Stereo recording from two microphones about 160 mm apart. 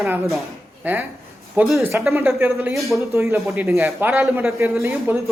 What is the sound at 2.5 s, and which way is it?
Speech, centre (ahead or behind).